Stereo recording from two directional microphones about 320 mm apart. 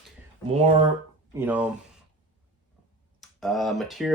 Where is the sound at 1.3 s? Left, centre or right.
Centre.